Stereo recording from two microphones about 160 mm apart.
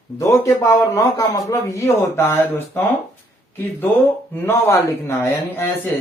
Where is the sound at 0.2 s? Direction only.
20° left (ahead or behind).